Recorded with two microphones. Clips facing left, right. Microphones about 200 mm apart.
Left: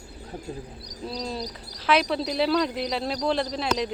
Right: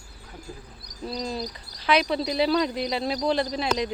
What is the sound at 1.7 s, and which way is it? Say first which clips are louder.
Speech: even; centre (ahead or behind).